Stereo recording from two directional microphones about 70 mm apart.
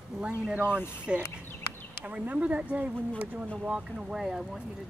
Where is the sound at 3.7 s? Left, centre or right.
Centre.